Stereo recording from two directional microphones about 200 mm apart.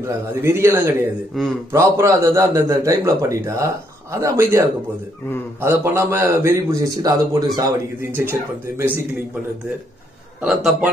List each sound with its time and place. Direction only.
0.0 s a man's voice: 10° right (ahead or behind)
1.3 s a man's voice: centre (ahead or behind)
1.7 s a man's voice: 15° right (ahead or behind)
10.4 s a man's voice: 5° right (ahead or behind)